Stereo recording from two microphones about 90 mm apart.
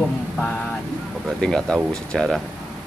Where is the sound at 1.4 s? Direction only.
5° left (ahead or behind).